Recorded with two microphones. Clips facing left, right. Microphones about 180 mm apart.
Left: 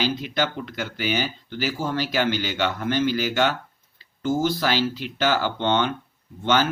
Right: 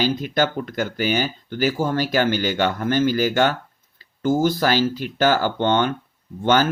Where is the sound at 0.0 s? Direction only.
45° right (ahead or behind).